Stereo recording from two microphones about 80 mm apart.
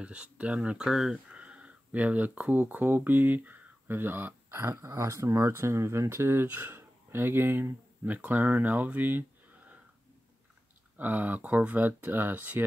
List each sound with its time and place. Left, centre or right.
0.0 s speech: centre
11.0 s speech: right